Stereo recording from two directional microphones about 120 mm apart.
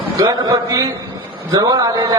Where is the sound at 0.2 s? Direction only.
30° right (ahead or behind).